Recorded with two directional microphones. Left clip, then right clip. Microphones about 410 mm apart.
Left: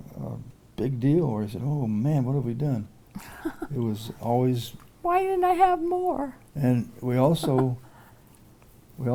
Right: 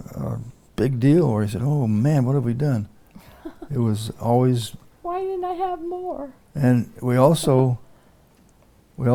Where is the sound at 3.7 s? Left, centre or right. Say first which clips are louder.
Right 5 dB; right.